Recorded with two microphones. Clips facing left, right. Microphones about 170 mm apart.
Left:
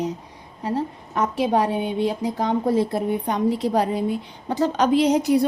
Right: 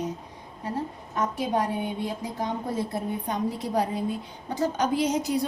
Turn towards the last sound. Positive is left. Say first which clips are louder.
# left 7 dB
turn(degrees=65)  # may be behind; listen again after turning